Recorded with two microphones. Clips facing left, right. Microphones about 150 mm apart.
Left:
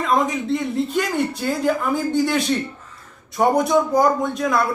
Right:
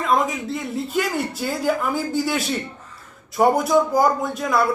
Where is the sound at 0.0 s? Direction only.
Centre (ahead or behind).